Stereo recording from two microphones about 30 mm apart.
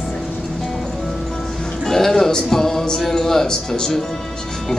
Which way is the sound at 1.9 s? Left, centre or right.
Centre.